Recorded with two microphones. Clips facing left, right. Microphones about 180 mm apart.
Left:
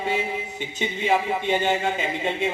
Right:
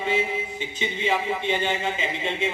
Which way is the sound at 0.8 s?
45° left (ahead or behind).